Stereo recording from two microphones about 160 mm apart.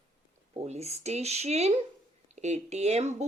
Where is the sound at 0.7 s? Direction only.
40° right (ahead or behind).